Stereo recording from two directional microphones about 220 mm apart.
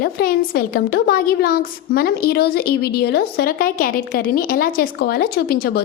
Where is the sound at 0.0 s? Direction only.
45° left (ahead or behind).